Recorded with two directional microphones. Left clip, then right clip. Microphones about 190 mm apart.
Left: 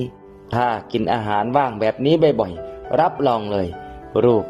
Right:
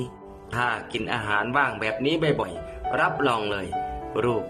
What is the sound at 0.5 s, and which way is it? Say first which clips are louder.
A man's voice: left 6 dB; 35° left (ahead or behind).